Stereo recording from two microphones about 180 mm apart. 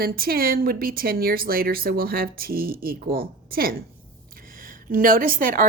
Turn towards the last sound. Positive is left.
turn(degrees=-50)  # may be behind; listen again after turning